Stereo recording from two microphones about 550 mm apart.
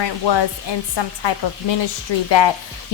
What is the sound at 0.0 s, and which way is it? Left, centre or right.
Speech, left.